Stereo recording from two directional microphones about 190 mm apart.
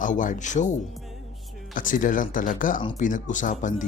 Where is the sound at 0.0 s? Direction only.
45° left (ahead or behind).